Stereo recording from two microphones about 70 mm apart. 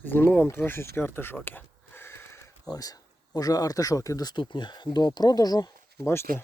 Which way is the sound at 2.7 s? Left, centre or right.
Left.